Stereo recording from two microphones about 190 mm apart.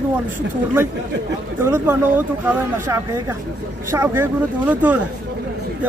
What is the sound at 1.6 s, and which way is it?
A man's voice, 10° right (ahead or behind).